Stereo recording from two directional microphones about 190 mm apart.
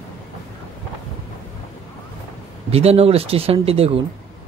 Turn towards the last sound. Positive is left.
turn(degrees=-30)  # may be behind; listen again after turning